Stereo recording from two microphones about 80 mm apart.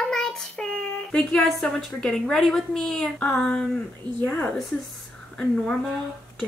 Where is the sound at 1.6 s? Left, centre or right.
Centre.